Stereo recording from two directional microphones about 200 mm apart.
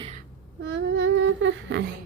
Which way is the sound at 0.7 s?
65° right (ahead or behind).